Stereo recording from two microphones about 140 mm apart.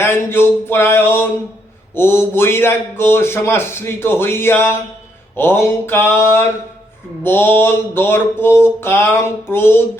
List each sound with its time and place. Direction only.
0.0 s a man's voice: 15° left (ahead or behind)